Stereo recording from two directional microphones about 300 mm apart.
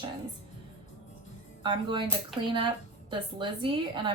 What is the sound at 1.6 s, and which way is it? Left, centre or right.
Speech, centre.